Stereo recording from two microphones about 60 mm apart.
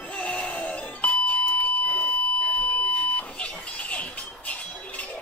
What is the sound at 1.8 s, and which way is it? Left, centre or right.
Buzzer, left.